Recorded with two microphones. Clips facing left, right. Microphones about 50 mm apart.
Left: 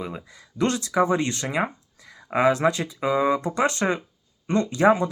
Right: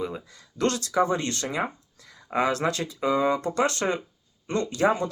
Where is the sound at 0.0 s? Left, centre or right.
Centre.